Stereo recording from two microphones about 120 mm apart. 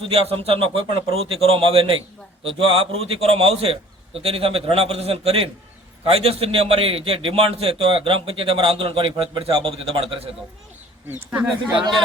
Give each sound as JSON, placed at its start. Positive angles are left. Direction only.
{"t": 0.0, "sound": "a man's voice", "side_deg": -55}
{"t": 11.3, "sound": "speech", "side_deg": -10}